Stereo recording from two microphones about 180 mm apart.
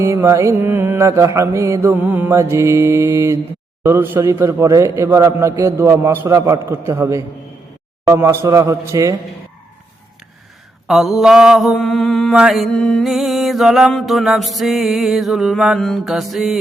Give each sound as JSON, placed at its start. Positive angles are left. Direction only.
{"t": 0.0, "sound": "a man's voice", "side_deg": -15}
{"t": 10.8, "sound": "mantra", "side_deg": 0}